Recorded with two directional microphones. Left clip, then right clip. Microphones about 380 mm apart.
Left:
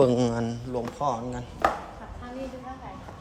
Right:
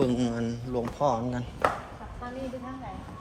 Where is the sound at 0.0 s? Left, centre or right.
Centre.